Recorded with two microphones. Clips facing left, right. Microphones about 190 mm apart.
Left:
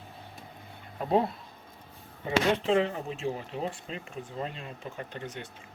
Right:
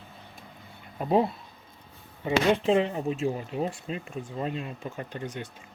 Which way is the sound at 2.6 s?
25° right (ahead or behind).